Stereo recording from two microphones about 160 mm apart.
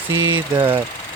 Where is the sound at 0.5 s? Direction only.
25° right (ahead or behind).